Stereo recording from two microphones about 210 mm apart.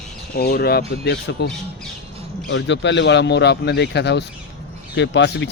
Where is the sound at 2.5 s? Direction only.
60° left (ahead or behind).